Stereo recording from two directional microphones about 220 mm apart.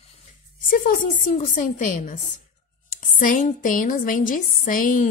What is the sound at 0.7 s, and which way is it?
Speech, 35° left (ahead or behind).